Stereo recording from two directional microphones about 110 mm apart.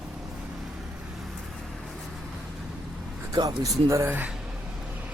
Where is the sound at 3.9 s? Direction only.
20° right (ahead or behind).